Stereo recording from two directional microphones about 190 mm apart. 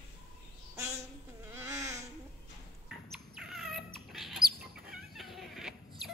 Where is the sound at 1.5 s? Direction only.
10° right (ahead or behind).